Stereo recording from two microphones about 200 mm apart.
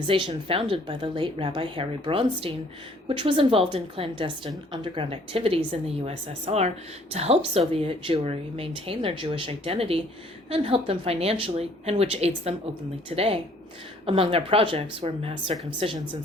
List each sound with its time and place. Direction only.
0.0 s speech: 25° right (ahead or behind)